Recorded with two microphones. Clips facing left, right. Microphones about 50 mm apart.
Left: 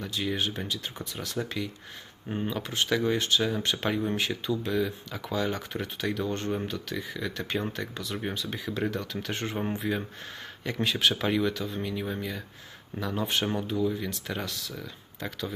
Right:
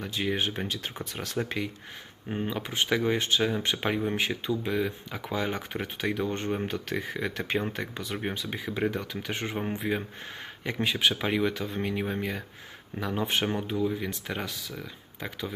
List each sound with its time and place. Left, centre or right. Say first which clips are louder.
0.0 s speech: right 1 dB; right
2.3 s speech: even; centre
6.7 s speech: right 2 dB; right
13.0 s speech: right 1 dB; right